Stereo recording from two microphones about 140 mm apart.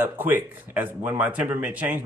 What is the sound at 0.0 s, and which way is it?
Speech, 15° right (ahead or behind).